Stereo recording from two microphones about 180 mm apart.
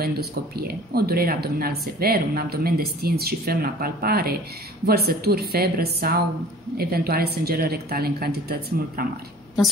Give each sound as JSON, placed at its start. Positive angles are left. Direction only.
{"t": 0.9, "sound": "speech", "side_deg": -60}